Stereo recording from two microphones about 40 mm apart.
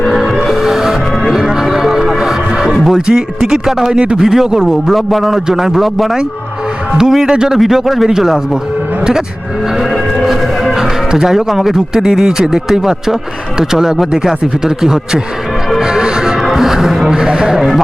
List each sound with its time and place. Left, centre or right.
0.0 s music: centre
2.9 s speech: centre
3.9 s speech: right
4.2 s speech: centre
4.9 s a man's voice: centre
10.2 s music: centre
11.1 s speech: centre
15.8 s music: centre
16.4 s music: centre
17.6 s a man's voice: centre